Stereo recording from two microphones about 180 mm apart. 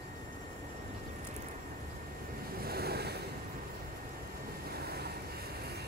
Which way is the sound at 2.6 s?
60° right (ahead or behind).